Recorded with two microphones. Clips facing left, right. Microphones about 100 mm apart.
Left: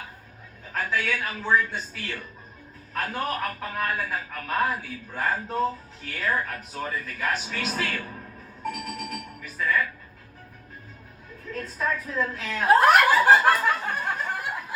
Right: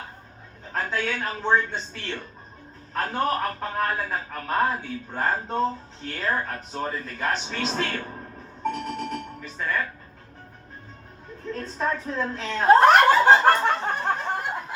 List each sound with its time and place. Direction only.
0.6 s speech: 25° right (ahead or behind)
11.4 s snicker: 25° right (ahead or behind)